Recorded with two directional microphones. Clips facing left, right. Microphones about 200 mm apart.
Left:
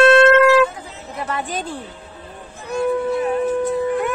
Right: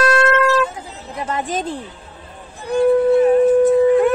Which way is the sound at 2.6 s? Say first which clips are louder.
Right 6 dB; 30° right (ahead or behind).